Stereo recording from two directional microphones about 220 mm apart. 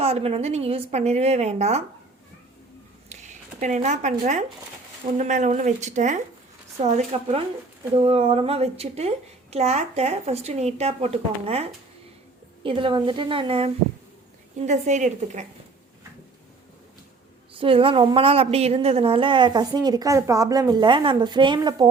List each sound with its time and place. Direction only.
0.0 s speech: 25° right (ahead or behind)
3.1 s speech: 30° right (ahead or behind)
12.6 s speech: 20° right (ahead or behind)
17.5 s speech: 25° right (ahead or behind)